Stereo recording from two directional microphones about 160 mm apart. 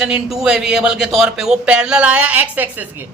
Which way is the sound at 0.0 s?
5° right (ahead or behind).